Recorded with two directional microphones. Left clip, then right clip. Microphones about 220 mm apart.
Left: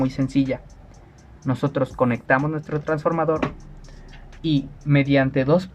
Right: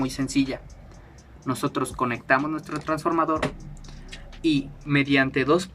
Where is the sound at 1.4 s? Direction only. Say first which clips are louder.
Left 3 dB; 30° left (ahead or behind).